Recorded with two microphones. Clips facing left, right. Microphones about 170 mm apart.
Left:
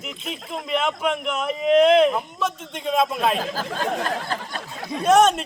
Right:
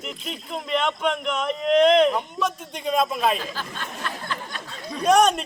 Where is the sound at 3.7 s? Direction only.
90° left.